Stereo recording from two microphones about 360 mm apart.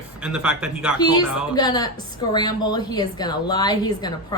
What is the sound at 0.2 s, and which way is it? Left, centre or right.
Speech, centre.